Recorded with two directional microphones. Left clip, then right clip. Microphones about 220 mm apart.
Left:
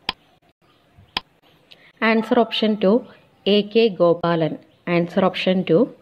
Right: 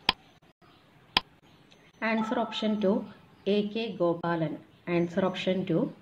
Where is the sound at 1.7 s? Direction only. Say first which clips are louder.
Left 11 dB; 35° left (ahead or behind).